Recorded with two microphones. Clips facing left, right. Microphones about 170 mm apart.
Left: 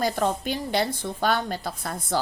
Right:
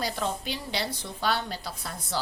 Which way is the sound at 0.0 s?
50° left (ahead or behind).